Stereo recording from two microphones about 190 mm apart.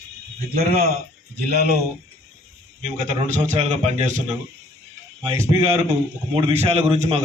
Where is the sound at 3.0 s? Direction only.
40° right (ahead or behind).